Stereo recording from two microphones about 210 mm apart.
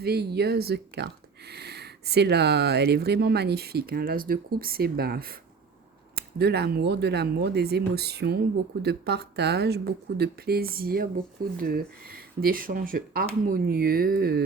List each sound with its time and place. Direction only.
0.0 s speech: 50° right (ahead or behind)